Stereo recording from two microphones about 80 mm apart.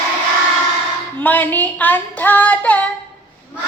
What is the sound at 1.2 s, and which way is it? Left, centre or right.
Female singing, left.